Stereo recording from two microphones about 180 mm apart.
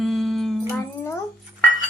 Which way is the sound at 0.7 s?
15° left (ahead or behind).